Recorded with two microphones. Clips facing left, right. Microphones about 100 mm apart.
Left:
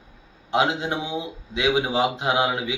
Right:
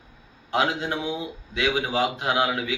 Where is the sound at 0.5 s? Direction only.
20° left (ahead or behind).